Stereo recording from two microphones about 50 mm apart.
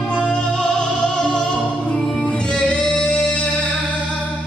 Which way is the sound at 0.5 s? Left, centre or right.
Centre.